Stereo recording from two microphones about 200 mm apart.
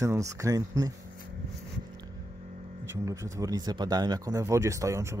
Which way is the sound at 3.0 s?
15° right (ahead or behind).